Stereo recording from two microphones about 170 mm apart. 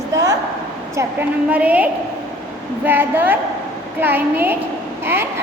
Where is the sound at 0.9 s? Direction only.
10° right (ahead or behind).